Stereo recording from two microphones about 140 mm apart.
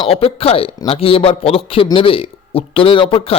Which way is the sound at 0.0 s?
45° left (ahead or behind).